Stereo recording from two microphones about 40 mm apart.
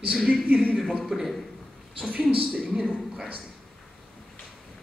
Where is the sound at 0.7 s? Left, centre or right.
Centre.